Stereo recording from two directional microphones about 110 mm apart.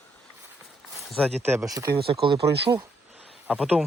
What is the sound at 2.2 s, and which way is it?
Speech, 45° right (ahead or behind).